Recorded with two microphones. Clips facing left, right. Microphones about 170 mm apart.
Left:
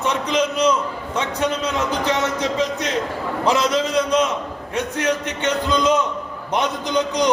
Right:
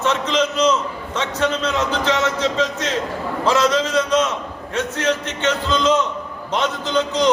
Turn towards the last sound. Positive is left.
turn(degrees=15)  # may be behind; listen again after turning